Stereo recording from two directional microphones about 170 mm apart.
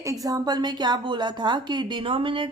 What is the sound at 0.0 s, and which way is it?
A woman's voice, 20° right (ahead or behind).